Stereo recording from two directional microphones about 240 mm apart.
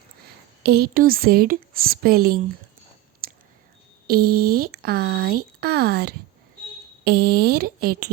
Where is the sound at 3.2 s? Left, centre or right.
Right.